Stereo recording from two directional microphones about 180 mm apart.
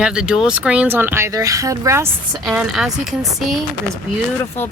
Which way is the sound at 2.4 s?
Centre (ahead or behind).